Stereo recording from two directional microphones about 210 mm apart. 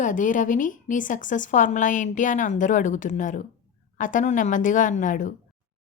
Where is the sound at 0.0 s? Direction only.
40° left (ahead or behind).